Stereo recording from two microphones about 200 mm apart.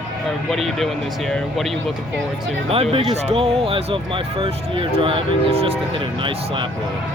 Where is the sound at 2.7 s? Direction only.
30° right (ahead or behind).